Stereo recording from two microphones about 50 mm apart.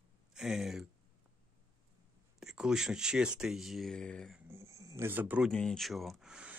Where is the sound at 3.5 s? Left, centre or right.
Centre.